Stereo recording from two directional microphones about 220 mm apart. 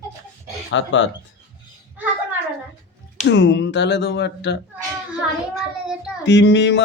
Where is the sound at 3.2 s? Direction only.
55° left (ahead or behind).